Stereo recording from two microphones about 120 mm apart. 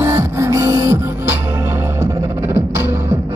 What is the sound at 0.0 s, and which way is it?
Music, 25° right (ahead or behind).